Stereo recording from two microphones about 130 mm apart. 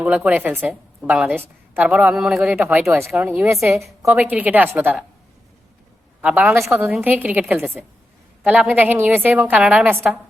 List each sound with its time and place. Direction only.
0.0 s speech: 10° right (ahead or behind)
2.8 s a woman's voice: centre (ahead or behind)
3.1 s speech: 10° right (ahead or behind)
3.8 s a woman's voice: centre (ahead or behind)
4.1 s speech: 10° right (ahead or behind)
6.2 s speech: 10° right (ahead or behind)